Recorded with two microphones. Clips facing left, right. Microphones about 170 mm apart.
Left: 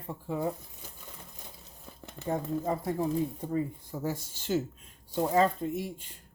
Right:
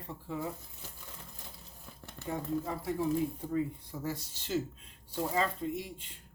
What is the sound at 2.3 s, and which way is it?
Cutlery, 45° left (ahead or behind).